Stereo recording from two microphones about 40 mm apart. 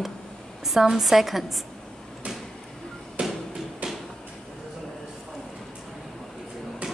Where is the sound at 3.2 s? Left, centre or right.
Right.